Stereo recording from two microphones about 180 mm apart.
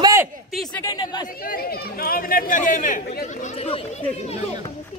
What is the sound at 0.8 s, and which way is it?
Speech, 20° left (ahead or behind).